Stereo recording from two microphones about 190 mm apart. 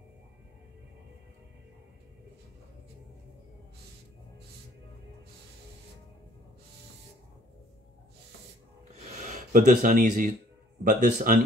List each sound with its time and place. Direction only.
9.2 s speech: 40° right (ahead or behind)